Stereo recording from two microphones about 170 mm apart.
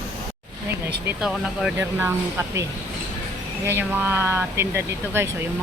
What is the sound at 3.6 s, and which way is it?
Speech, 10° right (ahead or behind).